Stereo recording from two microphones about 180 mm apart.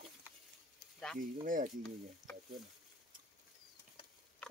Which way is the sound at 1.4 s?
45° right (ahead or behind).